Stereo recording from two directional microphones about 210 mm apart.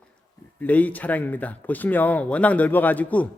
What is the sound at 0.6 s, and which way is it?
Speech, 5° left (ahead or behind).